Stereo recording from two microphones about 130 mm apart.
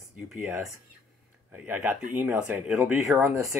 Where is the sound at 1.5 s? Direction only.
10° right (ahead or behind).